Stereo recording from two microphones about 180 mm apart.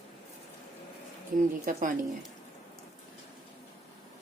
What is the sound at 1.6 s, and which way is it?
Speech, 45° right (ahead or behind).